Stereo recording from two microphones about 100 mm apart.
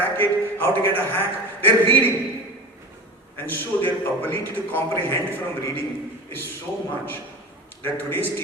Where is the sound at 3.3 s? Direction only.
20° left (ahead or behind).